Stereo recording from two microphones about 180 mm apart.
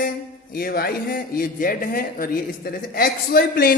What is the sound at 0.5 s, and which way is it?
A man's voice, 55° left (ahead or behind).